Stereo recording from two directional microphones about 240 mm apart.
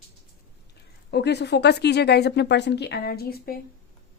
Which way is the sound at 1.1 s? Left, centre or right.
Left.